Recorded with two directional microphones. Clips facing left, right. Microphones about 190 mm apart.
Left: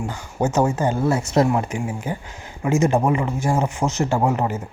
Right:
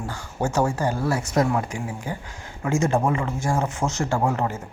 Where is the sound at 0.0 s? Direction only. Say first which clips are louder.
Left 4 dB; 20° left (ahead or behind).